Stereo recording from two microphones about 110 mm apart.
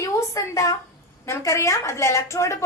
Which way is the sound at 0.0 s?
30° left (ahead or behind).